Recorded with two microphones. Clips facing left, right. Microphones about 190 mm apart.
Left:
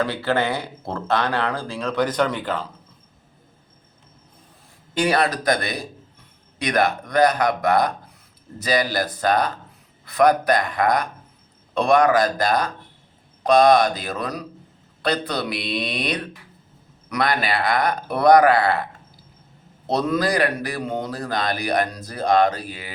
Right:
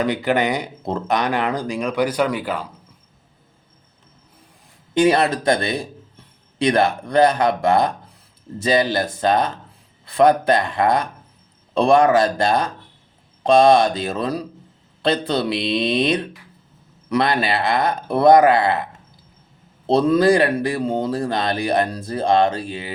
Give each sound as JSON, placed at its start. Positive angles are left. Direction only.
{"t": 0.0, "sound": "speech", "side_deg": -15}
{"t": 4.9, "sound": "speech", "side_deg": -25}
{"t": 19.9, "sound": "speech", "side_deg": -30}